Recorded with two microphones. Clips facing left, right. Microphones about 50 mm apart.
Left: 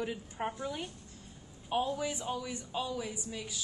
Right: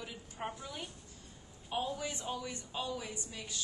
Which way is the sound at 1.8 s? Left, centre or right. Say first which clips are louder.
Left 4 dB; centre.